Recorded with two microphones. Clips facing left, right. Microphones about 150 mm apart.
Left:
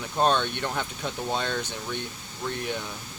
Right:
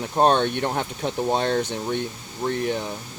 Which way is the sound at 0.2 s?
50° right (ahead or behind).